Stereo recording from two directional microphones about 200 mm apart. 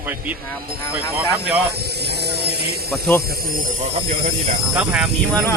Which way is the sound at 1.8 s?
55° right (ahead or behind).